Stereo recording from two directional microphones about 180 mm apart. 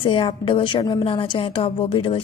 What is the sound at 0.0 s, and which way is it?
A woman's voice, 30° left (ahead or behind).